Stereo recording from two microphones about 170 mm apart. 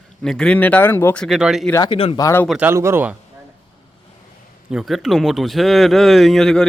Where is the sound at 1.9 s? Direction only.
35° left (ahead or behind).